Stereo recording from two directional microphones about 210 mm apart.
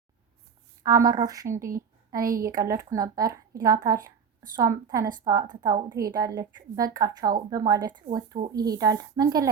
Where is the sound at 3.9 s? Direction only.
40° right (ahead or behind).